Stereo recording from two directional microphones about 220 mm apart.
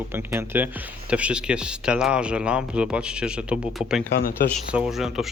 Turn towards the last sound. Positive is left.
turn(degrees=0)  # may be behind; listen again after turning